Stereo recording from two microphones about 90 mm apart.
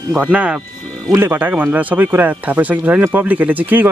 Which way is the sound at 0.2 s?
10° right (ahead or behind).